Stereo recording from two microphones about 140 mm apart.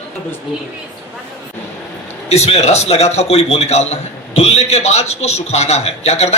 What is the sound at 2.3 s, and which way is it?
A man's voice, 50° left (ahead or behind).